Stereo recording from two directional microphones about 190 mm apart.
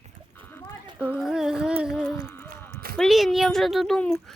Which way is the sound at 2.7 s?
50° right (ahead or behind).